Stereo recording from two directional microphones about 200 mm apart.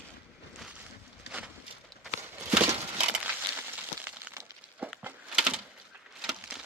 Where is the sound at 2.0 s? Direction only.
5° right (ahead or behind).